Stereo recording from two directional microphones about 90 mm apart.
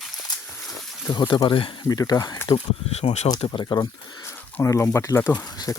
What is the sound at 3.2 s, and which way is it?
Speech, 55° left (ahead or behind).